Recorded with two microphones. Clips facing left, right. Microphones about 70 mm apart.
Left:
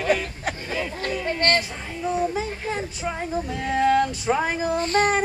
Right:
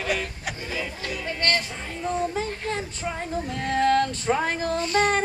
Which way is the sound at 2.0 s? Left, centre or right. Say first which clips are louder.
Left 2 dB; centre.